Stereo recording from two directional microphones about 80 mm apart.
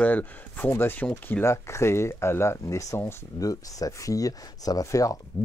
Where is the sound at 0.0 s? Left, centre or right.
Centre.